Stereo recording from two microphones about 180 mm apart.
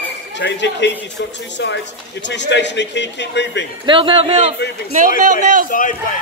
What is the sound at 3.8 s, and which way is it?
Speech, 25° right (ahead or behind).